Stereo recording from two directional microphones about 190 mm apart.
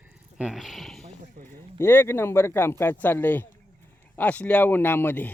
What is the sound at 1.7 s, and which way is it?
Speech, 10° left (ahead or behind).